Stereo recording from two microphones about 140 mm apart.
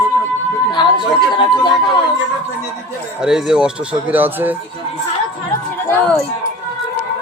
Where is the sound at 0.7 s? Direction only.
35° left (ahead or behind).